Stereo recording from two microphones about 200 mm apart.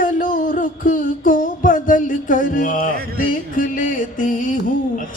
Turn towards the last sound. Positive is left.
turn(degrees=40)  # may be behind; listen again after turning